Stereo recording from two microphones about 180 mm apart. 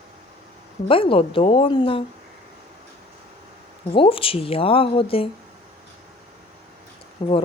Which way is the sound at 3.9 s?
30° left (ahead or behind).